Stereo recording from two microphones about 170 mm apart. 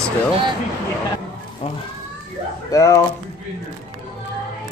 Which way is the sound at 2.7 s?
20° left (ahead or behind).